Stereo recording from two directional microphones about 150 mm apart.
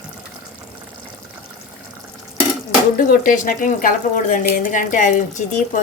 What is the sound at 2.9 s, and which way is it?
A woman's voice, 65° left (ahead or behind).